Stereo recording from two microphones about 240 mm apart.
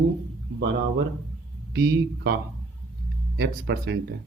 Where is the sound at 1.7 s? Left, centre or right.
Right.